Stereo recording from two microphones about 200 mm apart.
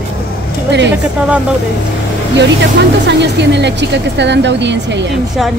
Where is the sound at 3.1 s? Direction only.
60° right (ahead or behind).